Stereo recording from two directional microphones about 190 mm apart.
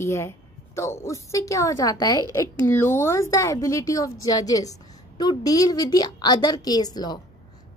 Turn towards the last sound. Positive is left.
turn(degrees=20)  # may be behind; listen again after turning